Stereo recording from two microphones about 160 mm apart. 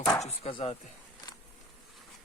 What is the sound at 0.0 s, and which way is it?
Chopping, 20° left (ahead or behind).